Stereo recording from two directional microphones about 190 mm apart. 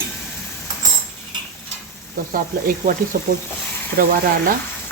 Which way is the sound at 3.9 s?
50° right (ahead or behind).